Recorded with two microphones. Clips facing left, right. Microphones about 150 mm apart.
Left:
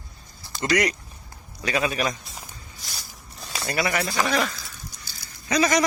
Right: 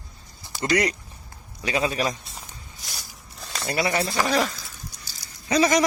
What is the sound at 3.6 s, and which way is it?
Speech, 25° right (ahead or behind).